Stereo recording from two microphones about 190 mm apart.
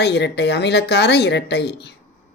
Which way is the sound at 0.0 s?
65° left (ahead or behind).